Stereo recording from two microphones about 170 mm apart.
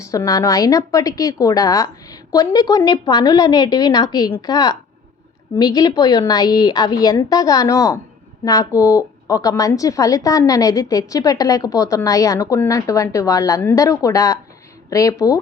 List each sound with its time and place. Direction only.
0.0 s a woman's voice: 20° left (ahead or behind)